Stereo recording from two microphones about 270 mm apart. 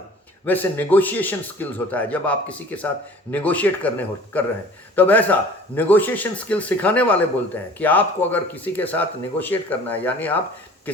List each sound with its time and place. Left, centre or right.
0.4 s a man's voice: centre